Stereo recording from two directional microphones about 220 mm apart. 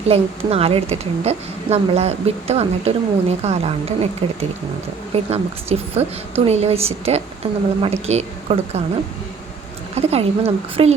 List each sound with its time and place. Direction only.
0.1 s a woman's voice: 25° right (ahead or behind)
9.9 s a woman's voice: 30° right (ahead or behind)